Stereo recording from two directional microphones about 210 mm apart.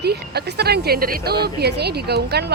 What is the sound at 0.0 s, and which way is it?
Speech, 50° right (ahead or behind).